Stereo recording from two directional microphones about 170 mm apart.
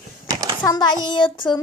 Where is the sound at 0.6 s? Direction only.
25° left (ahead or behind).